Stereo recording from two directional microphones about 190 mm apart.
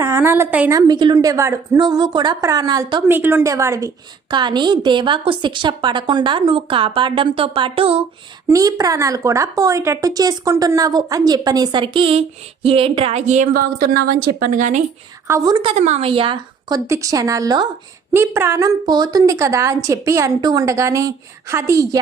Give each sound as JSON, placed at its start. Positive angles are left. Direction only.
{"t": 0.0, "sound": "a woman's voice", "side_deg": -15}
{"t": 0.8, "sound": "a woman's voice", "side_deg": -20}
{"t": 8.4, "sound": "a woman's voice", "side_deg": -20}
{"t": 14.5, "sound": "speech", "side_deg": -40}
{"t": 15.3, "sound": "a woman's voice", "side_deg": -20}
{"t": 15.7, "sound": "a woman's voice", "side_deg": -35}